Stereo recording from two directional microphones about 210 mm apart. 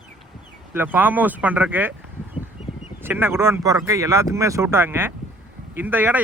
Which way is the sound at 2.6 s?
30° left (ahead or behind).